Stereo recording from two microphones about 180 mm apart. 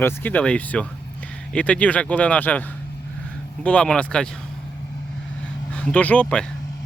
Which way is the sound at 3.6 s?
5° left (ahead or behind).